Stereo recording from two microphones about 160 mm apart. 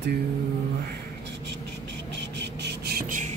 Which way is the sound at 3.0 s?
55° right (ahead or behind).